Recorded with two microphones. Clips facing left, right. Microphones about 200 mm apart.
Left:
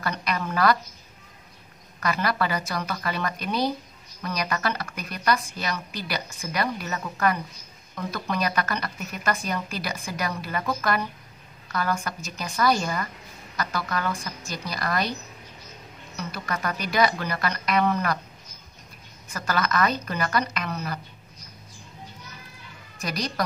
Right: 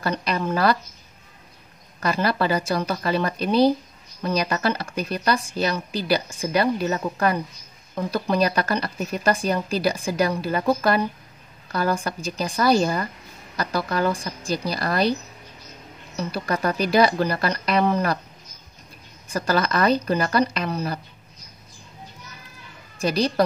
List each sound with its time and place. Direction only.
0.0 s speech: 30° right (ahead or behind)
2.0 s speech: 30° right (ahead or behind)
16.2 s speech: 30° right (ahead or behind)
19.2 s speech: 30° right (ahead or behind)
22.9 s speech: 30° right (ahead or behind)